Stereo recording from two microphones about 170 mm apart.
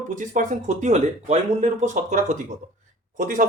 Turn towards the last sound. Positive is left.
turn(degrees=-50)  # may be behind; listen again after turning